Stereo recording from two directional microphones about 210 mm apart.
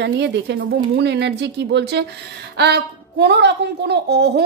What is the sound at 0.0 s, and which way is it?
A woman's voice, 55° right (ahead or behind).